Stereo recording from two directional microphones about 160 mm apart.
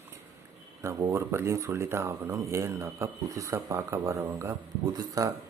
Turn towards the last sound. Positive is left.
turn(degrees=-20)  # may be behind; listen again after turning